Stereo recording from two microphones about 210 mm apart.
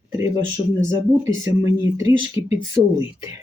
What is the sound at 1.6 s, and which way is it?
Speech, 15° right (ahead or behind).